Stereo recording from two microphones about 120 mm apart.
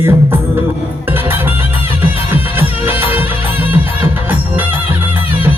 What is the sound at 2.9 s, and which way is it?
Music, 20° right (ahead or behind).